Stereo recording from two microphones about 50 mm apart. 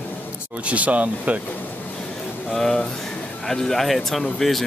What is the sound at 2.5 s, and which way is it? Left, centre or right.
Speech, centre.